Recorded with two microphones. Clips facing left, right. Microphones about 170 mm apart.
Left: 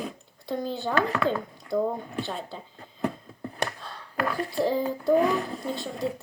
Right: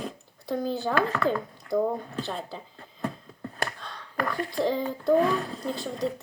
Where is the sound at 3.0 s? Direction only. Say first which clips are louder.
Left 3 dB; 15° left (ahead or behind).